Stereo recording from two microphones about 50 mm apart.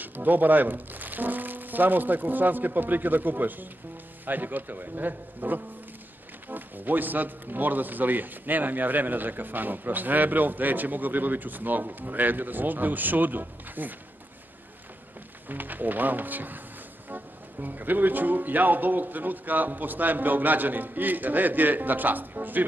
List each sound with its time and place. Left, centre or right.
0.0 s a man's voice: right
15.4 s a man's voice: right